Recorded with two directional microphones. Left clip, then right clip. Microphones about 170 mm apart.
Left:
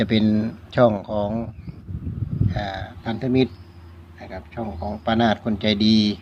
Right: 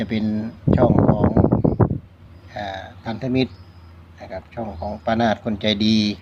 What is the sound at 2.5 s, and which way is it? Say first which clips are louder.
Speech: right 2 dB; 5° left (ahead or behind).